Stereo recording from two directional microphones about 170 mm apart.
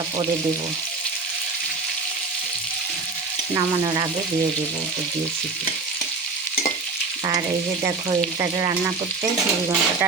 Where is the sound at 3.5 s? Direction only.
20° right (ahead or behind).